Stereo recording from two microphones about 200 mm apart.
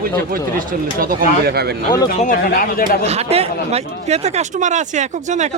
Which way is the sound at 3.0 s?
30° right (ahead or behind).